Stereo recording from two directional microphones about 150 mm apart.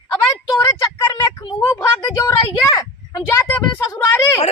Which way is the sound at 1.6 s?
20° left (ahead or behind).